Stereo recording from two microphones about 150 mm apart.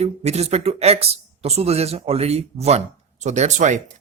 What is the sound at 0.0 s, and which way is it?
Speech, 45° right (ahead or behind).